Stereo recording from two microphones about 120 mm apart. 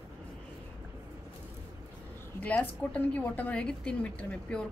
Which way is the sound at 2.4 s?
10° left (ahead or behind).